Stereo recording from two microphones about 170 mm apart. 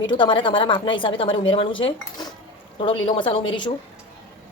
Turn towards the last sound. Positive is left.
turn(degrees=30)  # may be behind; listen again after turning